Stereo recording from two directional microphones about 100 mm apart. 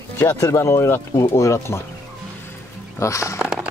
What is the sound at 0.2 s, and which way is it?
Speech, 25° left (ahead or behind).